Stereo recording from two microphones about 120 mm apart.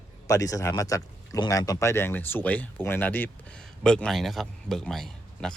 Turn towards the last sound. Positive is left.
turn(degrees=5)  # may be behind; listen again after turning